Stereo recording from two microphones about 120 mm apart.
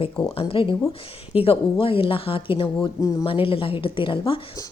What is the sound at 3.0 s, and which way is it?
Speech, 30° left (ahead or behind).